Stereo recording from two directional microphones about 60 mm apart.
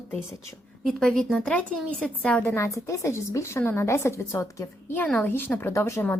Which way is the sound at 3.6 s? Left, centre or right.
Left.